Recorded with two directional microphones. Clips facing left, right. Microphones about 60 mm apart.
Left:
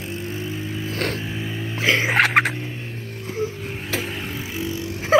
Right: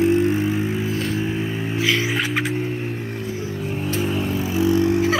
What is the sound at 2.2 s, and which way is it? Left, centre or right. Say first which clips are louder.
Music: left 5 dB; left.